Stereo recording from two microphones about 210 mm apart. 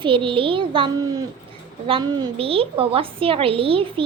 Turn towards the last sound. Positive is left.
turn(degrees=-25)  # may be behind; listen again after turning